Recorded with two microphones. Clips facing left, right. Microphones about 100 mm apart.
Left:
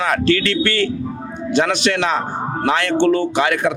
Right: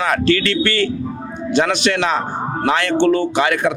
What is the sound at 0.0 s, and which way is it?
Speech, 25° right (ahead or behind).